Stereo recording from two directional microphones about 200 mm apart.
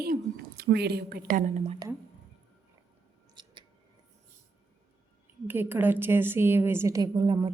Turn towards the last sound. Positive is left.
turn(degrees=-25)  # may be behind; listen again after turning